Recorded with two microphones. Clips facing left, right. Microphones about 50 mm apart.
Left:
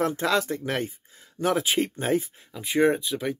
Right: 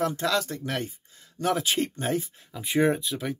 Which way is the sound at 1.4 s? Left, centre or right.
Centre.